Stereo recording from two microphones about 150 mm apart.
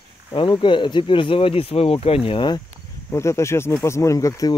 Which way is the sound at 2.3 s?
30° left (ahead or behind).